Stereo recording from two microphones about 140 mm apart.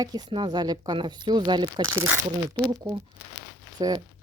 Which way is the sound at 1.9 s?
15° right (ahead or behind).